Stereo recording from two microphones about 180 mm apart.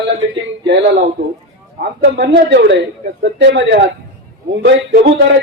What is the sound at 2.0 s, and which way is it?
Speech, 70° right (ahead or behind).